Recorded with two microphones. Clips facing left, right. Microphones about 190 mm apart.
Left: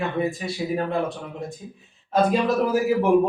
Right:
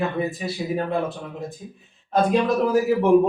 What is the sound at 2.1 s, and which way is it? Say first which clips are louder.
Speech: right 1 dB; 5° left (ahead or behind).